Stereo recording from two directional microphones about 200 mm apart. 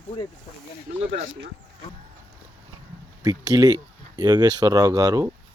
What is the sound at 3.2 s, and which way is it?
Speech, 20° right (ahead or behind).